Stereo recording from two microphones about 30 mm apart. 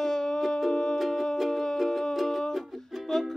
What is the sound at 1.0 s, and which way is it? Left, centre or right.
Music, centre.